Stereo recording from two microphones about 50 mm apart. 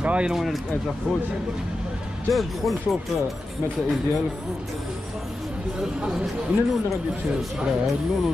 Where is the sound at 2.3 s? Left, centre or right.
Centre.